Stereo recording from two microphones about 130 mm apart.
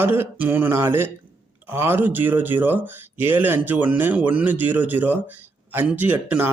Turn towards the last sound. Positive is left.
turn(degrees=-15)  # may be behind; listen again after turning